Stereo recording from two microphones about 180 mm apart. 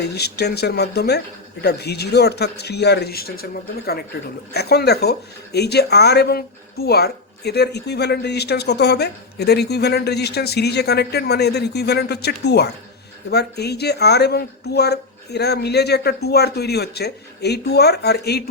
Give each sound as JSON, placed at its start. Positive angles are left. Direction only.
{"t": 0.0, "sound": "speech", "side_deg": 65}